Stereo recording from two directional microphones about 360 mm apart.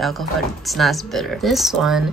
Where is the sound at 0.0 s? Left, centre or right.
Centre.